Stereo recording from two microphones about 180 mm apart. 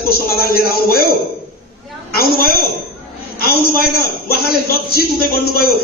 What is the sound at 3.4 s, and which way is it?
A man's voice, 60° left (ahead or behind).